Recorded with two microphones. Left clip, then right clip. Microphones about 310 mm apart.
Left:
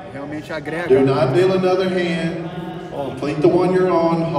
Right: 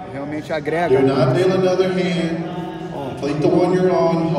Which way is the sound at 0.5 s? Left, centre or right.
Centre.